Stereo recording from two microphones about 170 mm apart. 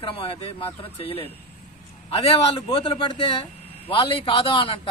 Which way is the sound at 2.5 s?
30° left (ahead or behind).